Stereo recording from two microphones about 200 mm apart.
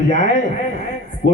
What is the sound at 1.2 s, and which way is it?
Mantra, 45° left (ahead or behind).